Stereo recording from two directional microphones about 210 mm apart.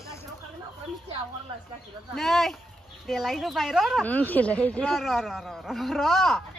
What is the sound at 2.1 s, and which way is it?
Speech, centre (ahead or behind).